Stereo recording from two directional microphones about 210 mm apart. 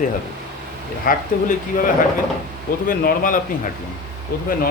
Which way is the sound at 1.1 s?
45° left (ahead or behind).